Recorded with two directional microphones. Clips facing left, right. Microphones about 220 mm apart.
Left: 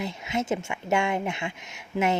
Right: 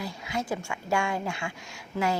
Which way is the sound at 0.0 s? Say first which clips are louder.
Left 4 dB; 20° left (ahead or behind).